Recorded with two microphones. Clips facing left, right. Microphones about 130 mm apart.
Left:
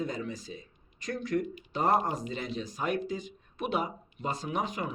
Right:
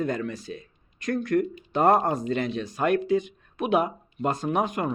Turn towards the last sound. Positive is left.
turn(degrees=-55)  # may be behind; listen again after turning